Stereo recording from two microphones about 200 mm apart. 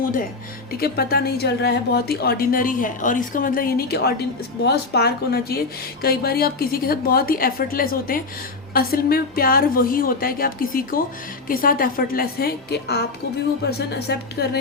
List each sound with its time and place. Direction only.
0.7 s a woman's voice: 50° left (ahead or behind)